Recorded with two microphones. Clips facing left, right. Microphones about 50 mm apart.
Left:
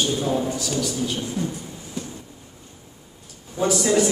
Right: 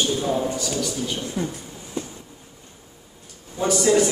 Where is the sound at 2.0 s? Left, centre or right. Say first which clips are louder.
Right 2 dB; right.